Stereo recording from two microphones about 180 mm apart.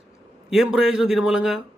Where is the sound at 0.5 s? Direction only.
5° right (ahead or behind).